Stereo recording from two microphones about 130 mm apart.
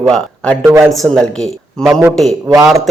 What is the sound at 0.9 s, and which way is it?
Speech, 5° left (ahead or behind).